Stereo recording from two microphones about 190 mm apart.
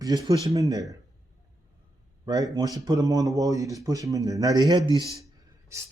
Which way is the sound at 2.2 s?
20° right (ahead or behind).